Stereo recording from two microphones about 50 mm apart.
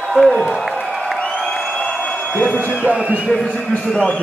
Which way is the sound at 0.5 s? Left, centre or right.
Centre.